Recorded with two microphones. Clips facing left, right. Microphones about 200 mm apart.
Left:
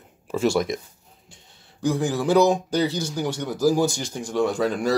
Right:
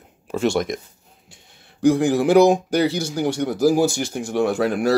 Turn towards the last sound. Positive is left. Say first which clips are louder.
# right 2 dB
turn(degrees=-10)  # may be behind; listen again after turning